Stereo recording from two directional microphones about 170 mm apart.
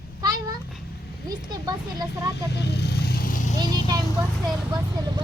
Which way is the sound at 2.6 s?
75° left (ahead or behind).